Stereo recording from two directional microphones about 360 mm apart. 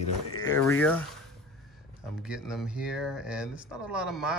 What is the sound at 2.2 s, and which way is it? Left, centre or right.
Speech, centre.